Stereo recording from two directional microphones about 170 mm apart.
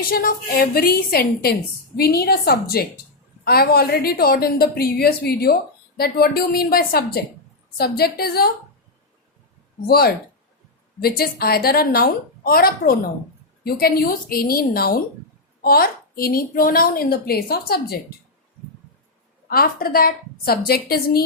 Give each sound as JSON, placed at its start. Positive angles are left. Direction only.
{"t": 0.0, "sound": "a woman's voice", "side_deg": 60}
{"t": 9.8, "sound": "a woman's voice", "side_deg": 65}
{"t": 19.5, "sound": "a woman's voice", "side_deg": 60}